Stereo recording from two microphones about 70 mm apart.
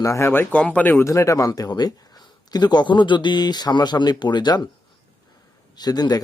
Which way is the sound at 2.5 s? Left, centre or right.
Left.